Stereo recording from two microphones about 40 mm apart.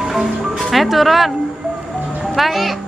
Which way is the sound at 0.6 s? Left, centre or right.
Centre.